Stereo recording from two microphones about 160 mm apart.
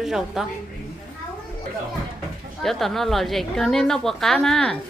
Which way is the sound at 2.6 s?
Centre (ahead or behind).